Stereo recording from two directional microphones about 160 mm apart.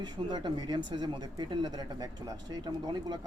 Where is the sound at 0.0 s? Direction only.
25° right (ahead or behind).